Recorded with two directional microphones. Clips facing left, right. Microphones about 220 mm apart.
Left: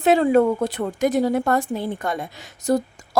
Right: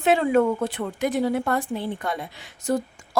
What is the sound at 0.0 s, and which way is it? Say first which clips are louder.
A woman's voice: left 3 dB; 40° left (ahead or behind).